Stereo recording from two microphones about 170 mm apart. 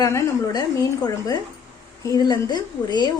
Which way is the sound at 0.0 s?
20° left (ahead or behind).